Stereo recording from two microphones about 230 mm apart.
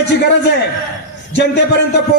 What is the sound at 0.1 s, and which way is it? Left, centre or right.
A man's voice, left.